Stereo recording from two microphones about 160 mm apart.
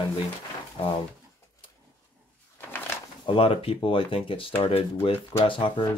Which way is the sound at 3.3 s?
35° left (ahead or behind).